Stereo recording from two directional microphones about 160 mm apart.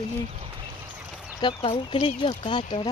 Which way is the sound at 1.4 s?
30° left (ahead or behind).